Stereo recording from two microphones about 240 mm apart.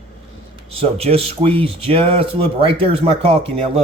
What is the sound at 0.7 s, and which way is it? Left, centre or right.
Speech, right.